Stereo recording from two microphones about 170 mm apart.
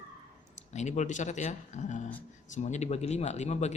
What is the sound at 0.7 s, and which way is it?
A man's voice, 45° left (ahead or behind).